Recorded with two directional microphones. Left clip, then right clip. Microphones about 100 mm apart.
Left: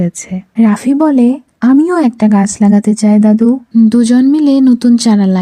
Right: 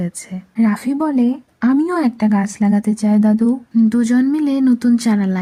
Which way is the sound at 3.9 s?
40° left (ahead or behind).